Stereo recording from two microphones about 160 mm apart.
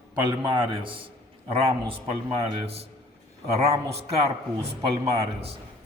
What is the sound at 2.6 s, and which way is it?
Speech, 40° right (ahead or behind).